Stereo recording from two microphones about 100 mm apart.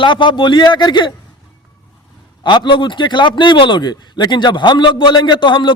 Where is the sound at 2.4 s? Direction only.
50° left (ahead or behind).